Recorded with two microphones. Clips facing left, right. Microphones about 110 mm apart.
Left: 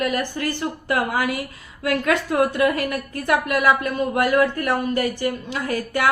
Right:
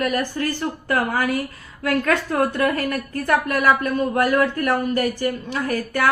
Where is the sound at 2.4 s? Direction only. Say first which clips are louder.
Left 1 dB; 20° left (ahead or behind).